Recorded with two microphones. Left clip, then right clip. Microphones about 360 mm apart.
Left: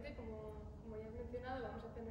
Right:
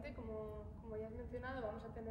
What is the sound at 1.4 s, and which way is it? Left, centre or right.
Speech, centre.